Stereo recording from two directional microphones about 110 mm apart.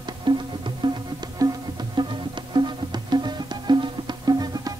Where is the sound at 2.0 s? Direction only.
45° right (ahead or behind).